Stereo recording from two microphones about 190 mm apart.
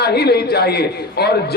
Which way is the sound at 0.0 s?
60° left (ahead or behind).